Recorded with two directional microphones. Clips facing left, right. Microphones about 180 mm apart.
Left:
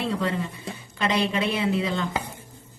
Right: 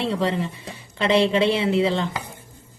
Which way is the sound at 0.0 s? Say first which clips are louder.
Right 3 dB; 25° right (ahead or behind).